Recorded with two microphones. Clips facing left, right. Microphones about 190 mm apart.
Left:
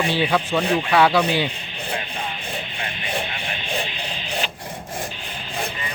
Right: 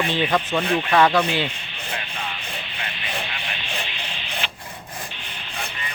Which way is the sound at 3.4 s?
40° left (ahead or behind).